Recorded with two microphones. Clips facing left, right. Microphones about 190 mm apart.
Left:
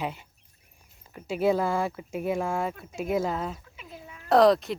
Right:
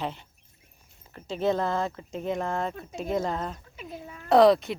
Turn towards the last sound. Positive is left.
turn(degrees=0)  # may be behind; listen again after turning